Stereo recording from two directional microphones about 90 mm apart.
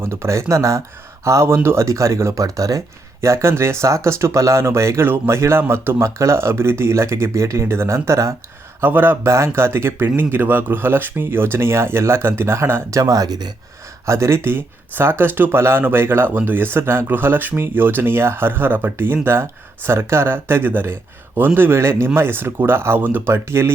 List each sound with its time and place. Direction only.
0.0 s speech: 30° right (ahead or behind)
14.0 s speech: 30° right (ahead or behind)